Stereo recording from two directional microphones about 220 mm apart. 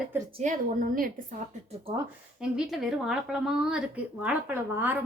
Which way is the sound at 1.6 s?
25° right (ahead or behind).